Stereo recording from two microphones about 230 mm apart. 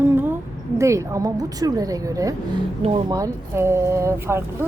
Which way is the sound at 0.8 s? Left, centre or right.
Centre.